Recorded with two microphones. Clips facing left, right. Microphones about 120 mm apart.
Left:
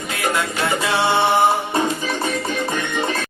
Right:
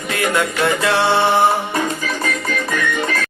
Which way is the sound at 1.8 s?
30° left (ahead or behind).